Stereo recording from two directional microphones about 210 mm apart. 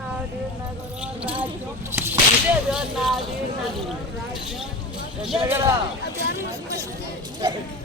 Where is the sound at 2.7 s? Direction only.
Centre (ahead or behind).